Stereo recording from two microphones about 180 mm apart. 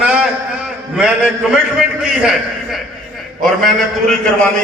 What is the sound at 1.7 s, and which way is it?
A man's voice, 5° right (ahead or behind).